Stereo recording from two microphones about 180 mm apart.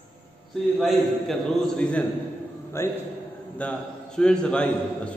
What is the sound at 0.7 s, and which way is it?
A man's voice, centre (ahead or behind).